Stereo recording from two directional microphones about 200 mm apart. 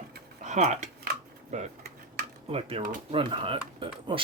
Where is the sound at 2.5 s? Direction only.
30° right (ahead or behind).